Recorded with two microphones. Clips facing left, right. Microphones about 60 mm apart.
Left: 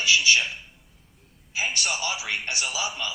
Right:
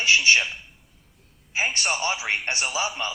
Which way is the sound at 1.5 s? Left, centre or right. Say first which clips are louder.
Right 3 dB; right.